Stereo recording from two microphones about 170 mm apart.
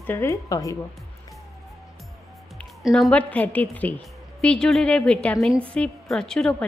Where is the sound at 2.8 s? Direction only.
Centre (ahead or behind).